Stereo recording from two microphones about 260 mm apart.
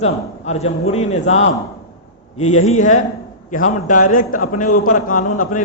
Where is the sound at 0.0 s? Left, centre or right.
Left.